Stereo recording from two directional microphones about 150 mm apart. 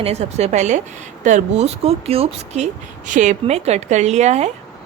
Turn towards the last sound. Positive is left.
turn(degrees=-50)  # may be behind; listen again after turning